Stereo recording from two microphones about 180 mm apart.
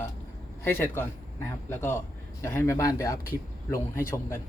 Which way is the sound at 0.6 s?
10° left (ahead or behind).